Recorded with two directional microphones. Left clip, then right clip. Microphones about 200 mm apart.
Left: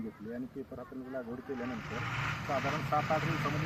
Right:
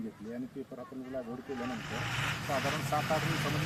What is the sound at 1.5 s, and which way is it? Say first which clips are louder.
Speech: right 3 dB; 60° right (ahead or behind).